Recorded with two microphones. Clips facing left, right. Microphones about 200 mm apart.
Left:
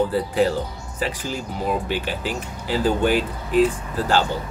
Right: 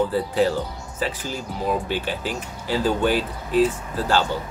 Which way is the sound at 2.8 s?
45° left (ahead or behind).